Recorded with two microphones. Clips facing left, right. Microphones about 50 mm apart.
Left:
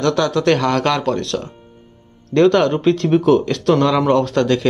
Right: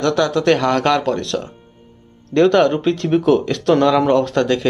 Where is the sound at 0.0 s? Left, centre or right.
Centre.